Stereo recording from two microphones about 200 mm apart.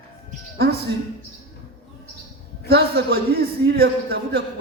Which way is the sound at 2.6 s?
50° right (ahead or behind).